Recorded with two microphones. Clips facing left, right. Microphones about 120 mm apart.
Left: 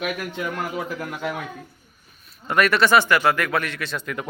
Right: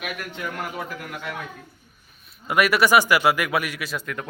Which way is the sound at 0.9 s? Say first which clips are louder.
Left 5 dB; 25° left (ahead or behind).